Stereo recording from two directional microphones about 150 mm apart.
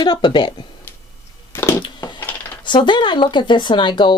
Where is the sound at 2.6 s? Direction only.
30° left (ahead or behind).